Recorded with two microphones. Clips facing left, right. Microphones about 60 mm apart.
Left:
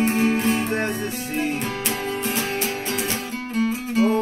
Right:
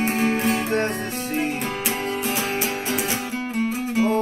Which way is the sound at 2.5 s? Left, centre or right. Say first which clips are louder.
Right 1 dB; centre.